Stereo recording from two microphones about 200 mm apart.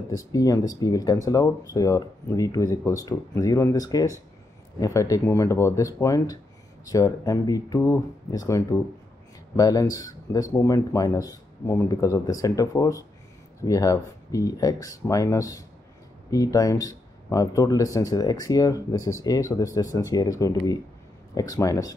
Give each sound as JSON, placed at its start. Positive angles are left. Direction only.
{"t": 0.1, "sound": "speech", "side_deg": 15}